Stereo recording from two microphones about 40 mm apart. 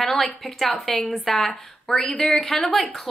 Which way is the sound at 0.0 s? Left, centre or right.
Centre.